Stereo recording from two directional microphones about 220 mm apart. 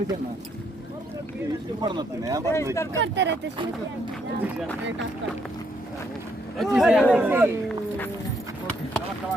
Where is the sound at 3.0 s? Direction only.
55° right (ahead or behind).